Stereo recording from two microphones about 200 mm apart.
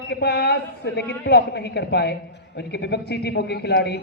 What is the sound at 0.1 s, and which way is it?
A man's voice, 55° left (ahead or behind).